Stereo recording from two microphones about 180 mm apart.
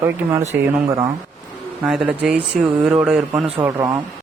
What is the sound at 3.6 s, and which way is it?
Speech, 15° right (ahead or behind).